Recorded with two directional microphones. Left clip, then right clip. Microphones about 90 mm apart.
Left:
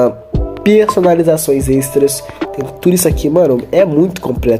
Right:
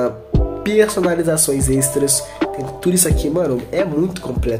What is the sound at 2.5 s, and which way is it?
Speech, 45° left (ahead or behind).